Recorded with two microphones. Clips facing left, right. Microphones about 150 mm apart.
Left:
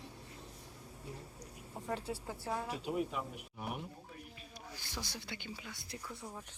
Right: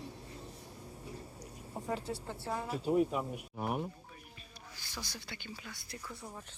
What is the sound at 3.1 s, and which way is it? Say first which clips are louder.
Speech: right 5 dB; 45° right (ahead or behind).